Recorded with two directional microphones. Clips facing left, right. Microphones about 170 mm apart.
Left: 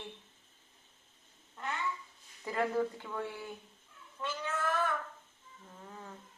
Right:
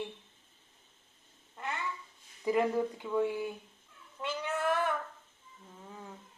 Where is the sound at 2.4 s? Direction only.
15° right (ahead or behind).